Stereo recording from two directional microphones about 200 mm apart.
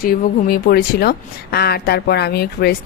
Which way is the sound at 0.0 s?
45° left (ahead or behind).